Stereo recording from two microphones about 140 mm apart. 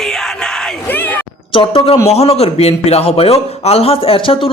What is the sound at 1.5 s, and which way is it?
A man's voice, 40° left (ahead or behind).